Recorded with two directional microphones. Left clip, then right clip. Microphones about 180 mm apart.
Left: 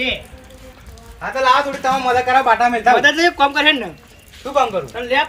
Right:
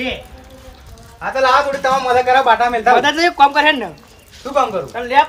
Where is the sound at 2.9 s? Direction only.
20° right (ahead or behind).